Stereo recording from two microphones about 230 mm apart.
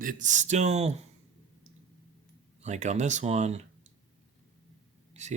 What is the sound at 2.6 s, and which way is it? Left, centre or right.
Speech, right.